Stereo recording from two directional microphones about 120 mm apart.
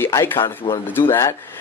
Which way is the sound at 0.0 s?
20° left (ahead or behind).